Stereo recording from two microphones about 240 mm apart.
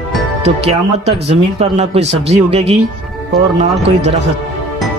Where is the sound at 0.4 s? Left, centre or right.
Right.